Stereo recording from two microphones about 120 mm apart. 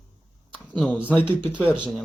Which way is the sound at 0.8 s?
10° right (ahead or behind).